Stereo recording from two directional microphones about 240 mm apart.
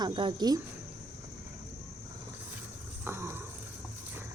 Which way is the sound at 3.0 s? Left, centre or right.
Centre.